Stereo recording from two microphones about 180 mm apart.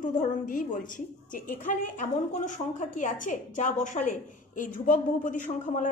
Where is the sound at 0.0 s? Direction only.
45° left (ahead or behind).